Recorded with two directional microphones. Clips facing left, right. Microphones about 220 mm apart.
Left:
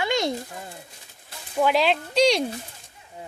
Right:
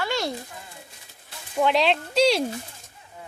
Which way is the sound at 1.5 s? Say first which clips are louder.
Even; 5° left (ahead or behind).